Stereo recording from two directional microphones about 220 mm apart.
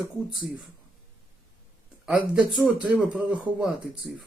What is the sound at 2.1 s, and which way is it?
Speech, 5° right (ahead or behind).